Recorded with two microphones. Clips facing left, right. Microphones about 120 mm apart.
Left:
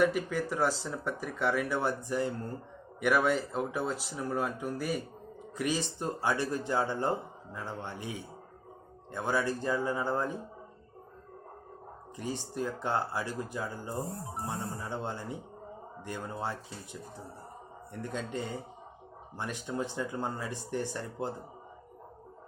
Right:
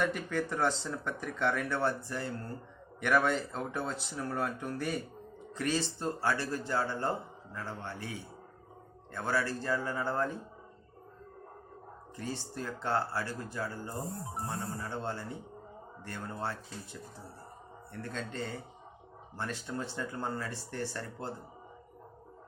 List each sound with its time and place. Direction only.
0.0 s speech: 5° left (ahead or behind)
9.1 s speech: 15° left (ahead or behind)
12.1 s speech: 15° left (ahead or behind)